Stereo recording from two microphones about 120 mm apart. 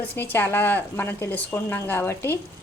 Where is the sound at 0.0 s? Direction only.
15° left (ahead or behind).